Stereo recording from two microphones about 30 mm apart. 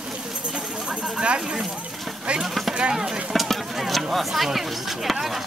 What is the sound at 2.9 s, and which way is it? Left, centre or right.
Speech, right.